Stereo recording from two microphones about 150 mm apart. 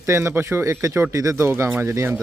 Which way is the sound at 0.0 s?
20° right (ahead or behind).